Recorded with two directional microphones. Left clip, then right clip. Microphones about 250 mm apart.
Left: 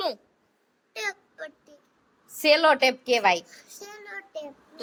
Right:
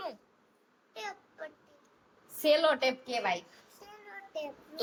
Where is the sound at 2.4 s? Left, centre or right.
Centre.